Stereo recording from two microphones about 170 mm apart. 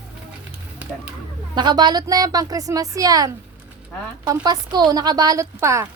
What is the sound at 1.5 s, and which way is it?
A woman's voice, 25° right (ahead or behind).